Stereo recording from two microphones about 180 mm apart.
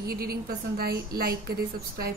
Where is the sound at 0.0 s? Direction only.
60° right (ahead or behind).